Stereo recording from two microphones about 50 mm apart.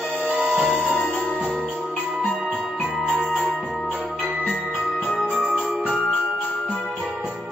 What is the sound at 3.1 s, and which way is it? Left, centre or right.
Music, centre.